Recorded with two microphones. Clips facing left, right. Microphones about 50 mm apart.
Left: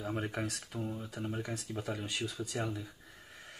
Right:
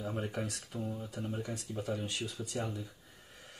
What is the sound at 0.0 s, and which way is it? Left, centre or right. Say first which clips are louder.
Speech: left 1 dB; left.